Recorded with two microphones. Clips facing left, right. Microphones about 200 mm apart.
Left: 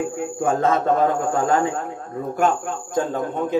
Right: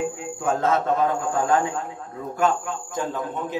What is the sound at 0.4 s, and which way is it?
A man's voice, 50° left (ahead or behind).